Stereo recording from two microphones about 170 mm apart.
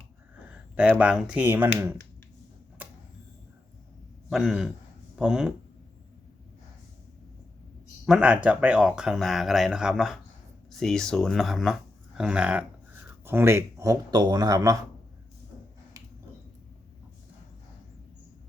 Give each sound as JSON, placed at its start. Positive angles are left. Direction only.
{"t": 0.8, "sound": "speech", "side_deg": -5}
{"t": 2.8, "sound": "a sound", "side_deg": -10}
{"t": 4.3, "sound": "speech", "side_deg": 0}
{"t": 8.0, "sound": "speech", "side_deg": -5}